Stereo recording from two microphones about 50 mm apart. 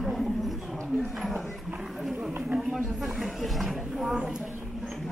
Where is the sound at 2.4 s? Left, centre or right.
Centre.